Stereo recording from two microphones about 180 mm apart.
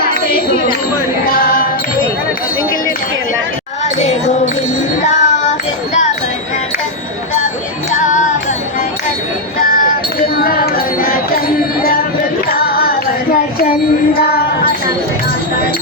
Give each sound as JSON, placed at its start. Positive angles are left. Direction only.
{"t": 1.3, "sound": "music", "side_deg": 55}
{"t": 3.9, "sound": "music", "side_deg": 40}
{"t": 10.3, "sound": "music", "side_deg": 55}
{"t": 12.5, "sound": "music", "side_deg": 55}
{"t": 14.2, "sound": "music", "side_deg": 60}